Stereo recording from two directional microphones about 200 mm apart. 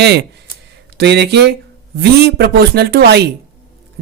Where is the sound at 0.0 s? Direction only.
55° right (ahead or behind).